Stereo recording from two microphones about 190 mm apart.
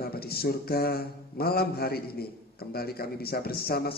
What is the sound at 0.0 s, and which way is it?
Mantra, 55° left (ahead or behind).